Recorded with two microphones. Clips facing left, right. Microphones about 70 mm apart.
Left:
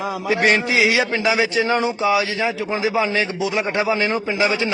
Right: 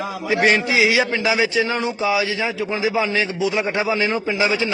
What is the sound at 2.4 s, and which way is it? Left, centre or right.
Speech, centre.